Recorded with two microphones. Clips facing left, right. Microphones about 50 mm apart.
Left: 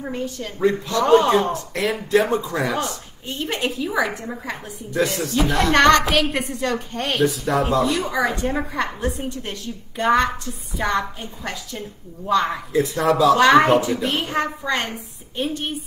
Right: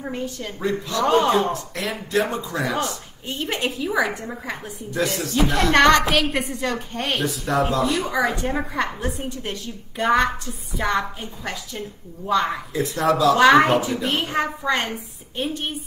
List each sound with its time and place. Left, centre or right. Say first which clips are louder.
0.0 s a woman's voice: left 1 dB; centre
2.3 s a man's voice: left 4 dB; left
3.3 s a woman's voice: left 1 dB; centre